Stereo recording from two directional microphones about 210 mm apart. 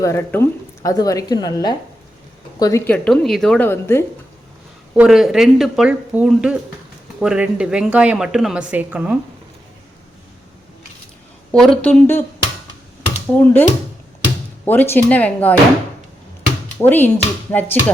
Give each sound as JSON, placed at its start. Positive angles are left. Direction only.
{"t": 0.0, "sound": "a woman's voice", "side_deg": 15}
{"t": 4.9, "sound": "speech", "side_deg": 0}
{"t": 11.5, "sound": "a woman's voice", "side_deg": 5}
{"t": 13.3, "sound": "a woman's voice", "side_deg": 10}
{"t": 16.7, "sound": "a woman's voice", "side_deg": 10}